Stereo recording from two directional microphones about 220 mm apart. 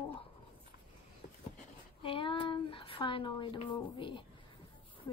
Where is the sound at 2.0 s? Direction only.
25° left (ahead or behind).